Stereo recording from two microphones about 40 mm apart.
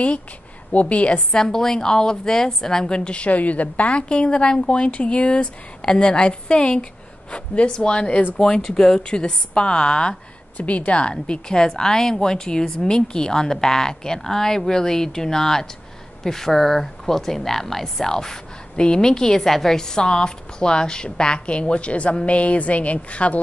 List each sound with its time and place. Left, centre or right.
0.7 s a woman's voice: left
1.4 s a woman's voice: centre
3.3 s a woman's voice: left
4.1 s speech: left
10.6 s a woman's voice: left